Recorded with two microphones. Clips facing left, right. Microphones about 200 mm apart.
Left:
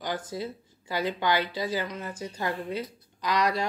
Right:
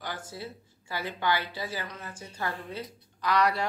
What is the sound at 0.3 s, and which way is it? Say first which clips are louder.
A woman's voice: left 6 dB; 15° left (ahead or behind).